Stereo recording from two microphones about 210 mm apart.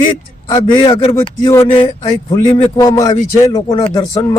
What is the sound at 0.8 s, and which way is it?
A man's voice, 25° left (ahead or behind).